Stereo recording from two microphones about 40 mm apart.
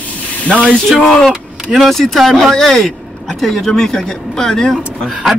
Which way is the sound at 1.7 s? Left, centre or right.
Centre.